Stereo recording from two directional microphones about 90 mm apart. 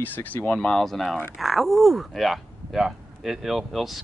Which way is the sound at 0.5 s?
5° left (ahead or behind).